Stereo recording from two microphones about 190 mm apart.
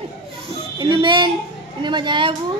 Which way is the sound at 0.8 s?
25° right (ahead or behind).